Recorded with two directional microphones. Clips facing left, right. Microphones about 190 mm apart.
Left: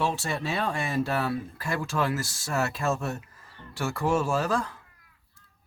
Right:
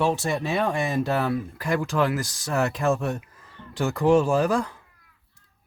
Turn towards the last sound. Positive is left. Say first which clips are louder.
# right 5 dB
turn(degrees=-15)  # may be behind; listen again after turning